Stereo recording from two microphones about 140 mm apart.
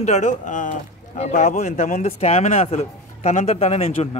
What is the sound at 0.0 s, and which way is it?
Speech, 60° left (ahead or behind).